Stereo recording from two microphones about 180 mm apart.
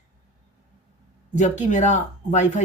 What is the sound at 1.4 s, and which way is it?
Speech, 40° left (ahead or behind).